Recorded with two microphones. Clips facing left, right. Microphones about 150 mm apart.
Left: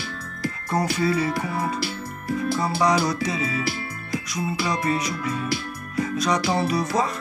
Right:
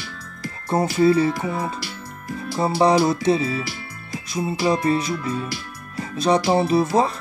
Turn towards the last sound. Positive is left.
turn(degrees=-30)  # may be behind; listen again after turning